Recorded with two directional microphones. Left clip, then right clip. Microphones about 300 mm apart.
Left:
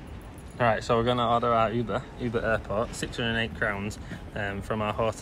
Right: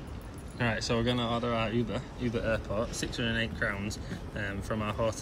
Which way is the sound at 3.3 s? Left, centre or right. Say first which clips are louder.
Left 4 dB; left.